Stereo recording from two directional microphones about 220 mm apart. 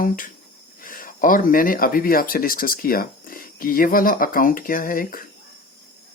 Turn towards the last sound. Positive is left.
turn(degrees=40)  # may be behind; listen again after turning